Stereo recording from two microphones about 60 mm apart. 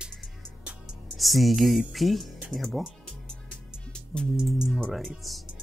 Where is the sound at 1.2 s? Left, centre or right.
Centre.